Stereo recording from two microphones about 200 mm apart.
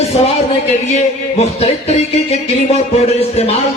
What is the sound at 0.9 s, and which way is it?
A man's voice, 30° left (ahead or behind).